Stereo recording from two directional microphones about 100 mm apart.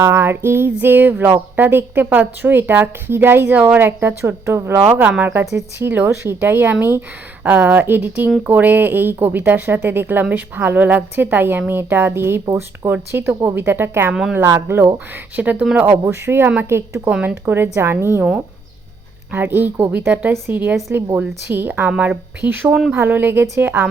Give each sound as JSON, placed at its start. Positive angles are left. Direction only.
{"t": 0.0, "sound": "a woman's voice", "side_deg": -25}
{"t": 14.1, "sound": "a woman's voice", "side_deg": -5}
{"t": 17.1, "sound": "a woman's voice", "side_deg": -15}
{"t": 19.3, "sound": "a woman's voice", "side_deg": -20}
{"t": 22.7, "sound": "a woman's voice", "side_deg": -5}
{"t": 23.0, "sound": "a woman's voice", "side_deg": -20}